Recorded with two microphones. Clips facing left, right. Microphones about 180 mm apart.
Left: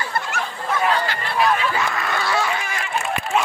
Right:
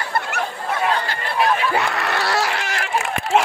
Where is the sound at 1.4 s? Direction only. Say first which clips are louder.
Right 1 dB; 60° right (ahead or behind).